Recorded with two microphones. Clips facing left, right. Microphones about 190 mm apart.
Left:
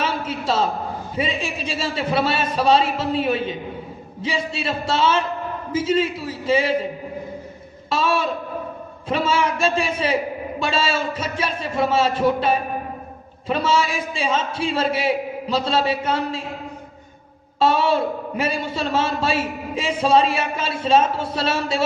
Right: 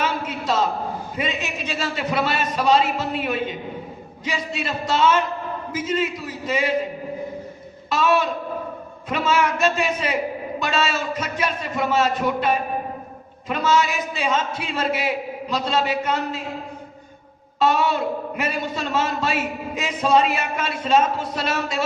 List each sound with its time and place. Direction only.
0.0 s a sound: 30° left (ahead or behind)
1.1 s a man's voice: 30° left (ahead or behind)
7.9 s a man's voice: 30° left (ahead or behind)
17.6 s a man's voice: 30° left (ahead or behind)